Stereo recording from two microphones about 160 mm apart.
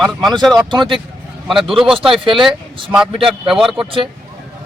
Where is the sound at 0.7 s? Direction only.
30° right (ahead or behind).